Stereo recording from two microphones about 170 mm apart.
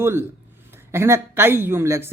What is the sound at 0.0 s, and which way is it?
Speech, 15° right (ahead or behind).